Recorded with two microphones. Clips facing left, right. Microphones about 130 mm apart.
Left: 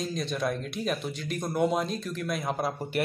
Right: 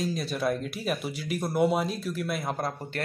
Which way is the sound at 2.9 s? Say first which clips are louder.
Left 6 dB; 10° left (ahead or behind).